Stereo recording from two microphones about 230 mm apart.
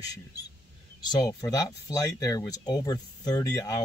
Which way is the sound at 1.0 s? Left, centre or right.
Centre.